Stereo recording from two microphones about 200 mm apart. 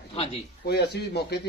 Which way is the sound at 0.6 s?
55° left (ahead or behind).